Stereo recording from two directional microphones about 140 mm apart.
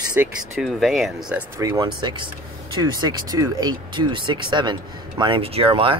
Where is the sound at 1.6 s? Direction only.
25° right (ahead or behind).